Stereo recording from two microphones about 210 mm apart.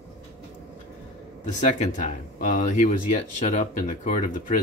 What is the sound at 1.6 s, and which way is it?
Speech, 35° left (ahead or behind).